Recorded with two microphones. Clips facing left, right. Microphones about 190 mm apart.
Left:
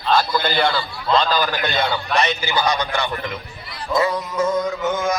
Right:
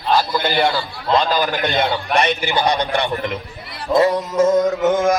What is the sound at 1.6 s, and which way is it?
Music, 20° right (ahead or behind).